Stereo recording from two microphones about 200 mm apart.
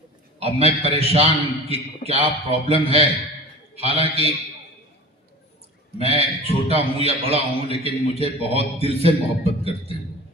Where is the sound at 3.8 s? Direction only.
30° right (ahead or behind).